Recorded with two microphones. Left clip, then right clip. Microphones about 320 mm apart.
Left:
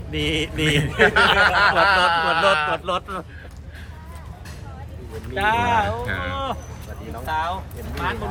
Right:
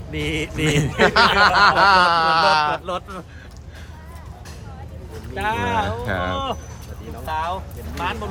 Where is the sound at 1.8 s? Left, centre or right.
Centre.